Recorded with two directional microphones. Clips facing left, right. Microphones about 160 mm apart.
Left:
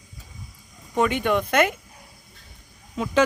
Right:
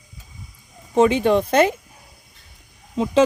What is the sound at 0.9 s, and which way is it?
Speech, 30° right (ahead or behind).